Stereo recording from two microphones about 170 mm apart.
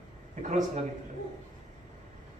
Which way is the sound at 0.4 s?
45° right (ahead or behind).